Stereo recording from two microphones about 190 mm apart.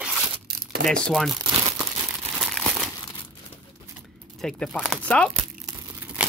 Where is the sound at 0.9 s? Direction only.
Centre (ahead or behind).